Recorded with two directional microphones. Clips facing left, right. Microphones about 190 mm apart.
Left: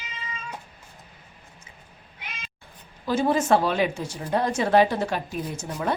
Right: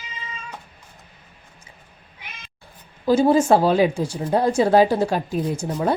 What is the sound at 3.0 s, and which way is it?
Speech, 30° right (ahead or behind).